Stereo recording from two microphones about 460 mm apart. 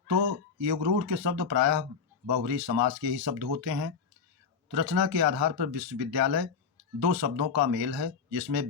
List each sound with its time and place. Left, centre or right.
0.1 s speech: right